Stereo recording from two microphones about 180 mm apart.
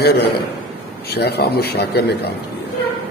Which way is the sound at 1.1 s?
65° left (ahead or behind).